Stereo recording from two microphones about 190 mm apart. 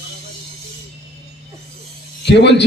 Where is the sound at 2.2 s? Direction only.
65° left (ahead or behind).